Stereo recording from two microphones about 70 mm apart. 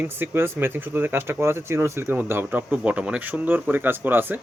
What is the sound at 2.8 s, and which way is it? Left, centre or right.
Speech, centre.